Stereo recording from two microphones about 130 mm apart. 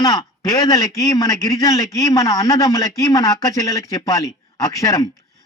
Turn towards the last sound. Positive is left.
turn(degrees=25)  # may be behind; listen again after turning